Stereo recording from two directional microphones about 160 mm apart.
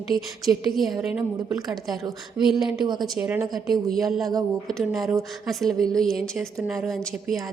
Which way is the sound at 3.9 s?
Centre (ahead or behind).